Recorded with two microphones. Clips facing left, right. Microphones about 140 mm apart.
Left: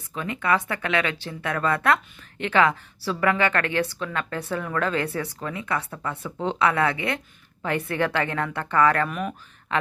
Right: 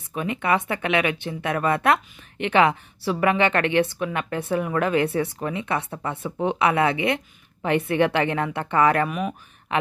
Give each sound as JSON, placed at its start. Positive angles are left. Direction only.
{"t": 0.1, "sound": "a woman's voice", "side_deg": -20}
{"t": 9.1, "sound": "speech", "side_deg": -5}